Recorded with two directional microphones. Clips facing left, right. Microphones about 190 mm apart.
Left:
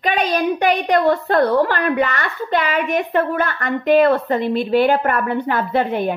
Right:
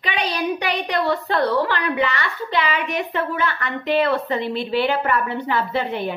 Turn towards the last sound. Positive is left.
turn(degrees=50)  # may be behind; listen again after turning